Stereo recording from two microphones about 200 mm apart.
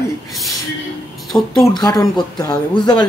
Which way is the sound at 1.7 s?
20° left (ahead or behind).